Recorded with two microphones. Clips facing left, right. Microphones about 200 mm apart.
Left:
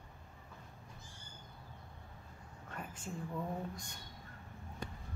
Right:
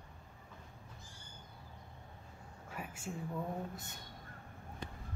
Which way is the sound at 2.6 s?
10° right (ahead or behind).